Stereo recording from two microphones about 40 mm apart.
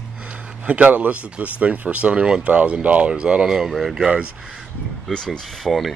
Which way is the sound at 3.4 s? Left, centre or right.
Centre.